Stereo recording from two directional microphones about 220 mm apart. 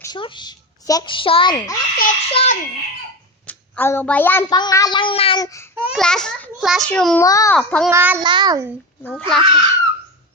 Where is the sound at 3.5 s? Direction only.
10° left (ahead or behind).